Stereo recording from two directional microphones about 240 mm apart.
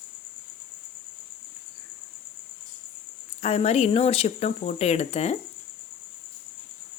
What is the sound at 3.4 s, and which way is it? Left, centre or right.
Speech, left.